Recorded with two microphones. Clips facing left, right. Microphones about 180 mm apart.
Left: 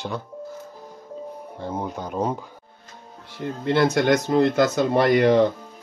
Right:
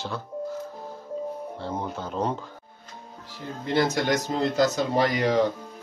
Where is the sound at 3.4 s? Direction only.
60° left (ahead or behind).